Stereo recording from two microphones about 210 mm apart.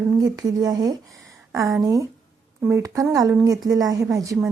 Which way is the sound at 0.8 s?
15° right (ahead or behind).